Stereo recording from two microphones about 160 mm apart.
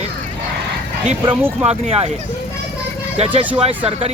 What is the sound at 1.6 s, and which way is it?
Speech, 40° right (ahead or behind).